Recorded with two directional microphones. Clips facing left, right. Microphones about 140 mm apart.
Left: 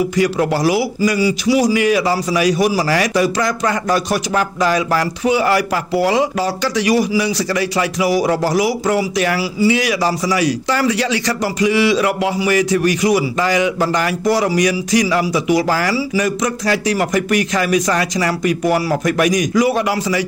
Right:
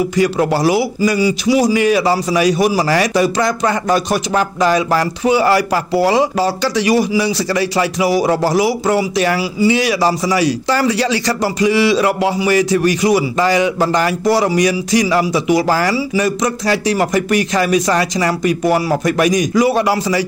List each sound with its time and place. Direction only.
0.2 s a man's voice: 30° right (ahead or behind)